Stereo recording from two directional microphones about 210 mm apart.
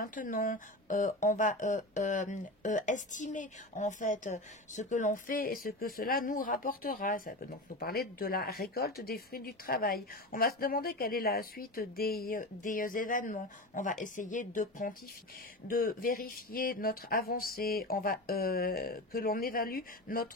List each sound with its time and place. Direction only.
0.0 s speech: 40° left (ahead or behind)